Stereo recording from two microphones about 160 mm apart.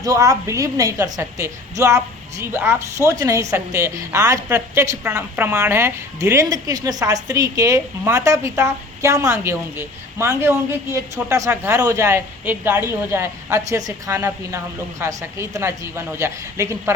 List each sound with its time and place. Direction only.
0.0 s a woman's voice: 20° right (ahead or behind)